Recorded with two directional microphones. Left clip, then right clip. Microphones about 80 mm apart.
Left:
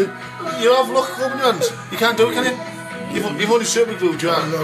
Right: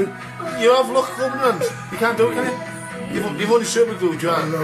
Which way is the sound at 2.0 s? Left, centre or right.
Left.